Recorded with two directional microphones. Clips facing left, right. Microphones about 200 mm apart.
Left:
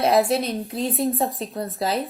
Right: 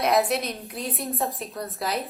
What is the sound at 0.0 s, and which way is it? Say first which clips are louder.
Speech: left 4 dB; 30° left (ahead or behind).